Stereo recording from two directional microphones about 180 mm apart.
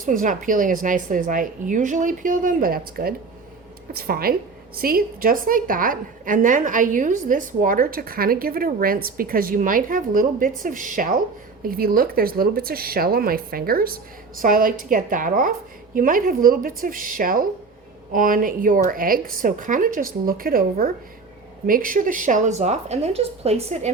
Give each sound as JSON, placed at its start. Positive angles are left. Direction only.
{"t": 0.0, "sound": "a woman's voice", "side_deg": -50}